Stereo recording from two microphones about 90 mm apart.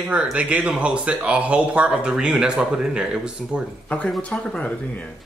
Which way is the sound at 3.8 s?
15° left (ahead or behind).